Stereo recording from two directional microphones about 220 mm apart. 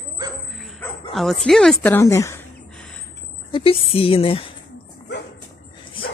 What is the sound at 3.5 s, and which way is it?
Speech, 25° left (ahead or behind).